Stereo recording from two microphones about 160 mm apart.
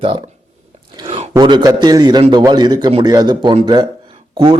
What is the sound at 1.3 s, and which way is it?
Speech, 25° right (ahead or behind).